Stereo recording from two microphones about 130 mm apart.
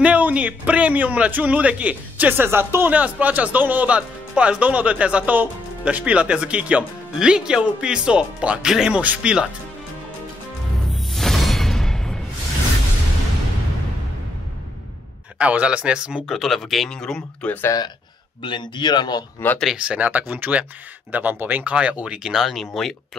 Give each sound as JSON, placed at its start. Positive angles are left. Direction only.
{"t": 0.0, "sound": "a man's voice", "side_deg": -10}
{"t": 10.9, "sound": "music", "side_deg": 0}
{"t": 15.3, "sound": "speech", "side_deg": -10}
{"t": 18.4, "sound": "speech", "side_deg": 40}
{"t": 19.6, "sound": "a man's voice", "side_deg": -5}